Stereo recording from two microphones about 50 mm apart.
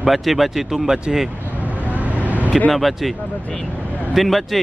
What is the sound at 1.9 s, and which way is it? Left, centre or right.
Vehicle, right.